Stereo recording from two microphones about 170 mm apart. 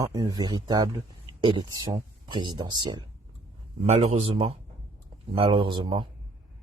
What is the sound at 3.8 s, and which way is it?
Speech, 40° right (ahead or behind).